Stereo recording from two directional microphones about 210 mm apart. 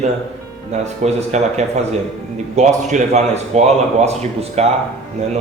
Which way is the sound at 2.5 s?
35° right (ahead or behind).